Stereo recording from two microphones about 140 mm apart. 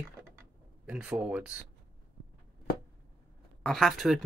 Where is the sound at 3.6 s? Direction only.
Centre (ahead or behind).